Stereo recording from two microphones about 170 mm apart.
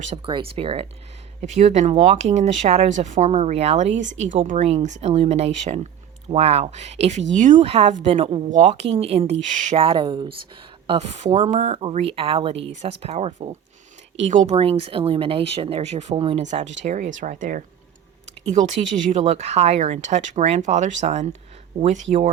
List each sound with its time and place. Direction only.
0.3 s speech: 30° right (ahead or behind)
1.4 s speech: 45° right (ahead or behind)
9.7 s speech: 30° right (ahead or behind)
16.4 s speech: 45° right (ahead or behind)